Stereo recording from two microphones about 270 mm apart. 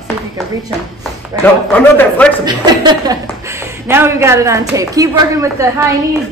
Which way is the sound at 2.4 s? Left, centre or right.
Centre.